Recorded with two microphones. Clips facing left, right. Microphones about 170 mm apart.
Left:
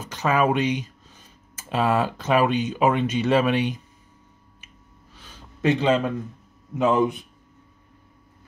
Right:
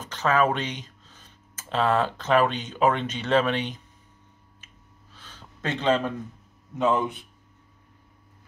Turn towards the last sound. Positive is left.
turn(degrees=10)  # may be behind; listen again after turning